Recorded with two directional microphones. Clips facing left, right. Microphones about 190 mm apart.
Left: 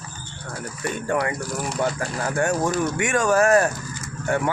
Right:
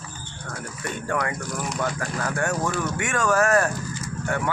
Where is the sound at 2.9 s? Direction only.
15° left (ahead or behind).